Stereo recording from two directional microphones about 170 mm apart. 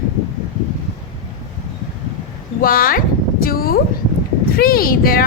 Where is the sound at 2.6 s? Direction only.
60° left (ahead or behind).